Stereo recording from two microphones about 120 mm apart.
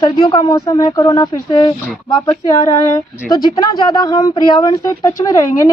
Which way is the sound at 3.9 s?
35° left (ahead or behind).